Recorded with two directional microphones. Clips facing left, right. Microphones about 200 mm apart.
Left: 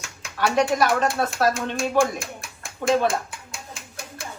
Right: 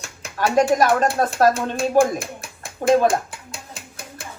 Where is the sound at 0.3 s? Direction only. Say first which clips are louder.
Right 3 dB; 45° right (ahead or behind).